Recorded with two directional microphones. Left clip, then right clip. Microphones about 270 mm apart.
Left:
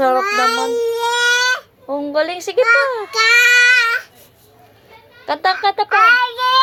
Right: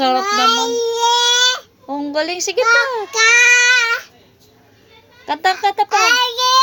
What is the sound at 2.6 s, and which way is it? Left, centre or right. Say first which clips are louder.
Speech: left 1 dB; centre.